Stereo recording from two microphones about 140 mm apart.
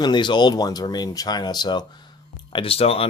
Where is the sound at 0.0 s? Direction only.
35° left (ahead or behind).